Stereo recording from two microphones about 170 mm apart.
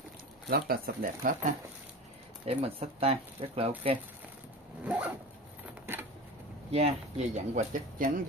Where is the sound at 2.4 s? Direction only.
35° right (ahead or behind).